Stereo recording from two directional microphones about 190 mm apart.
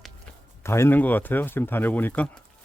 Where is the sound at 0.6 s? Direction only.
15° left (ahead or behind).